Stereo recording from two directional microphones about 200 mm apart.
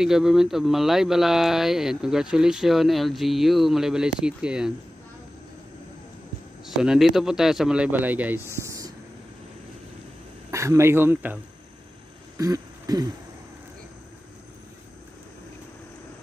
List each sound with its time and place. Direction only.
0.0 s speech: centre (ahead or behind)
6.6 s speech: centre (ahead or behind)
8.6 s whispering: 15° right (ahead or behind)
10.5 s speech: 15° right (ahead or behind)
12.4 s a sound: 15° right (ahead or behind)